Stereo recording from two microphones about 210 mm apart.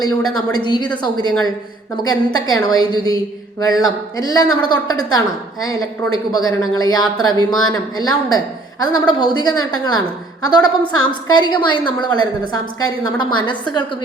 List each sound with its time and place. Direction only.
0.3 s a woman's voice: 20° left (ahead or behind)